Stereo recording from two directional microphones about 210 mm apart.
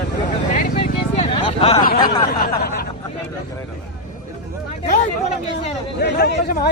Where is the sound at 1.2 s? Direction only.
30° left (ahead or behind).